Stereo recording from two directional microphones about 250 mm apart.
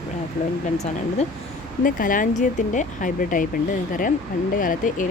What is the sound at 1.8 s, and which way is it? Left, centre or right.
Speech, left.